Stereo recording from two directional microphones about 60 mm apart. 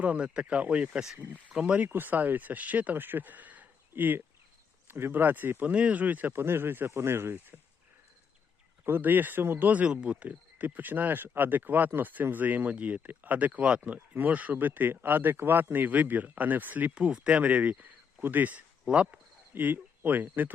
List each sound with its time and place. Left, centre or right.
0.0 s speech: right
1.9 s speech: right
6.4 s speech: right
8.8 s speech: right
18.9 s speech: centre
19.5 s speech: right